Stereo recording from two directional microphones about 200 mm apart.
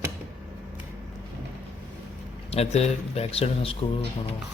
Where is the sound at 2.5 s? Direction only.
30° left (ahead or behind).